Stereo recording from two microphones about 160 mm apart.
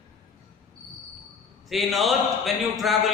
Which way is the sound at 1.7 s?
Centre (ahead or behind).